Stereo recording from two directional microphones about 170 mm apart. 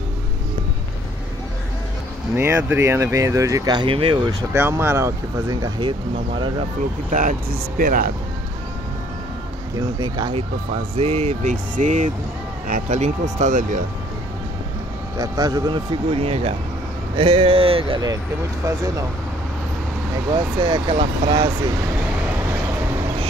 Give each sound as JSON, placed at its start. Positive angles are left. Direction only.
{"t": 2.3, "sound": "speech", "side_deg": -15}
{"t": 4.4, "sound": "speech", "side_deg": -15}
{"t": 7.2, "sound": "speech", "side_deg": -55}
{"t": 9.8, "sound": "speech", "side_deg": -25}
{"t": 11.5, "sound": "speech", "side_deg": -50}
{"t": 15.1, "sound": "speech", "side_deg": -20}
{"t": 18.6, "sound": "speech", "side_deg": -15}
{"t": 20.2, "sound": "speech", "side_deg": -30}